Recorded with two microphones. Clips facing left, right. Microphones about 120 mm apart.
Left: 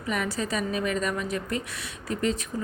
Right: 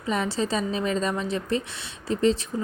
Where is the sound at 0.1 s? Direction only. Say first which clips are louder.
Right 3 dB; 30° right (ahead or behind).